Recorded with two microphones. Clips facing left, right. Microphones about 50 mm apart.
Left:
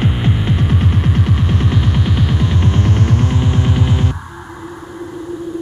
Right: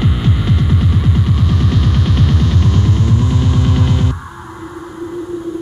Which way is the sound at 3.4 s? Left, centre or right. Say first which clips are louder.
Right 1 dB; left.